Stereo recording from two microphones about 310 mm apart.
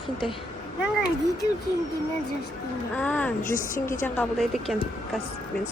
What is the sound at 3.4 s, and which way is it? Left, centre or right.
Speech, left.